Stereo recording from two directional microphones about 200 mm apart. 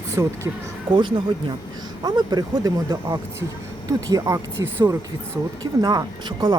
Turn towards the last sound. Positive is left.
turn(degrees=-20)  # may be behind; listen again after turning